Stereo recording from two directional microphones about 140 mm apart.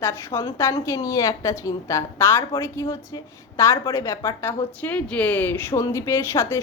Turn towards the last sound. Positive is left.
turn(degrees=20)  # may be behind; listen again after turning